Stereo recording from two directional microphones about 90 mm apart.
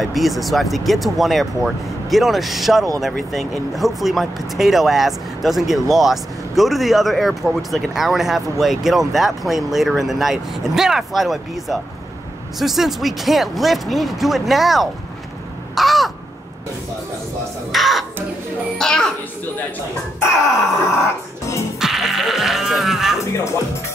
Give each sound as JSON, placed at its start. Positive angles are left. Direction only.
{"t": 0.0, "sound": "speech", "side_deg": 0}
{"t": 15.7, "sound": "crow", "side_deg": 0}
{"t": 17.7, "sound": "a woman's voice", "side_deg": 0}
{"t": 20.9, "sound": "music", "side_deg": 30}
{"t": 21.7, "sound": "music", "side_deg": -5}